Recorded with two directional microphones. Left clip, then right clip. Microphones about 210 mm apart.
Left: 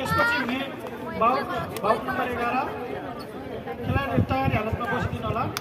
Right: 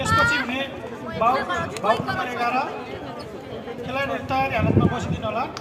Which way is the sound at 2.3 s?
55° right (ahead or behind).